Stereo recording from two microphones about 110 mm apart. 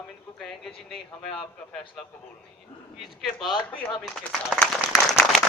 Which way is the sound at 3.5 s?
45° left (ahead or behind).